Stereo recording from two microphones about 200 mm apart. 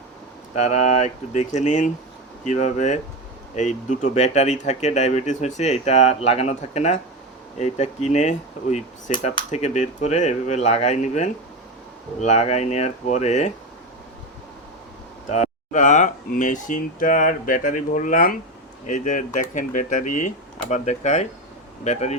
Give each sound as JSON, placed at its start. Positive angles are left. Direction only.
{"t": 0.5, "sound": "speech", "side_deg": 35}
{"t": 9.1, "sound": "speech", "side_deg": 25}
{"t": 9.5, "sound": "speech", "side_deg": 35}
{"t": 15.3, "sound": "speech", "side_deg": 35}